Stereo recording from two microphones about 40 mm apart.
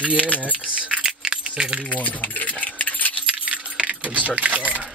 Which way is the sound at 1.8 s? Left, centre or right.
Left.